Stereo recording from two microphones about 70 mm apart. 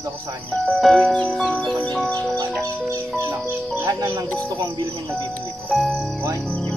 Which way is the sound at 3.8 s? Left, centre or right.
Right.